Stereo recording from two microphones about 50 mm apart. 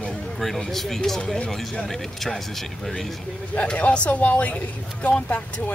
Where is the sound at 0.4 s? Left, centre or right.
Centre.